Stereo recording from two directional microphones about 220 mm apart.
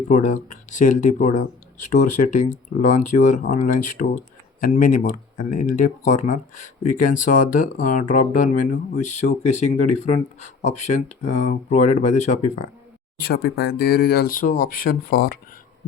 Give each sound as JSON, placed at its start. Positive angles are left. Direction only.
{"t": 0.1, "sound": "speech", "side_deg": 35}
{"t": 13.1, "sound": "speech", "side_deg": 45}